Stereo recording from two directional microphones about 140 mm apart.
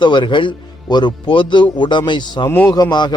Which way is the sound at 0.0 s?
35° left (ahead or behind).